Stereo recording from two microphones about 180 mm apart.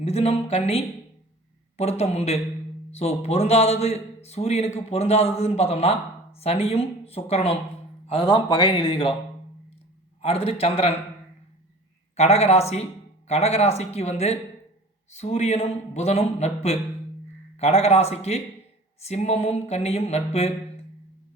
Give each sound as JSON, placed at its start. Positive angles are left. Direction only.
{"t": 0.0, "sound": "a man's voice", "side_deg": 35}
{"t": 10.2, "sound": "a man's voice", "side_deg": 35}
{"t": 12.1, "sound": "a man's voice", "side_deg": 35}
{"t": 17.6, "sound": "a man's voice", "side_deg": 35}